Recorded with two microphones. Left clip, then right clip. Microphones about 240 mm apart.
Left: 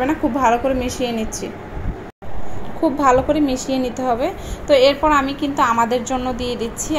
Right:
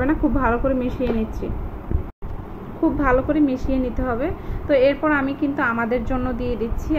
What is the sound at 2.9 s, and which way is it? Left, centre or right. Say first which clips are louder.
A woman's voice: left 5 dB; left.